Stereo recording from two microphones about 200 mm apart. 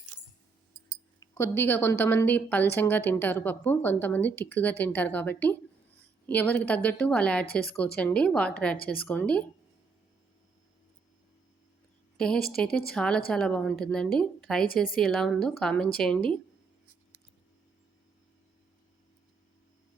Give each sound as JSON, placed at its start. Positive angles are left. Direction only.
{"t": 1.2, "sound": "a woman's voice", "side_deg": 15}
{"t": 7.4, "sound": "speech", "side_deg": 50}
{"t": 7.9, "sound": "a woman's voice", "side_deg": 5}
{"t": 12.1, "sound": "a woman's voice", "side_deg": 5}